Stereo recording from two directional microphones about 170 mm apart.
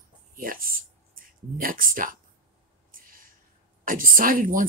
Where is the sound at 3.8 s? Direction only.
55° right (ahead or behind).